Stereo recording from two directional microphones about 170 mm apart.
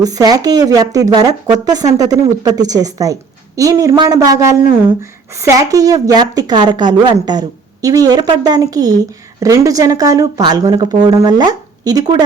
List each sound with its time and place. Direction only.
0.0 s speech: 20° right (ahead or behind)